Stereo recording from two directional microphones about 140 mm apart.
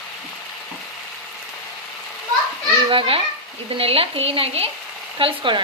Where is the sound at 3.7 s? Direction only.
45° right (ahead or behind).